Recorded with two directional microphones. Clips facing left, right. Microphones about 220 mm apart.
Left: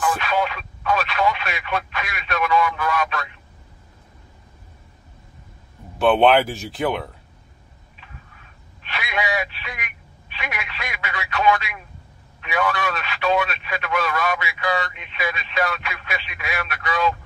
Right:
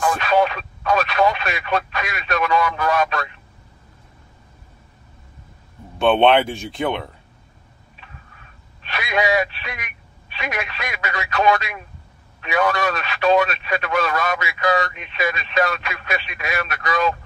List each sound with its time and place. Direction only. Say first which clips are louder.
0.3 s speech: right 5 dB; 40° right (ahead or behind)
5.9 s speech: right 1 dB; centre (ahead or behind)
8.8 s a sound: right 5 dB; 40° right (ahead or behind)
10.3 s speech: right 5 dB; 40° right (ahead or behind)